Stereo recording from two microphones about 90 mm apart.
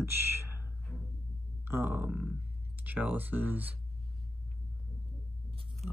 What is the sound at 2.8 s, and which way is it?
Speech, 20° right (ahead or behind).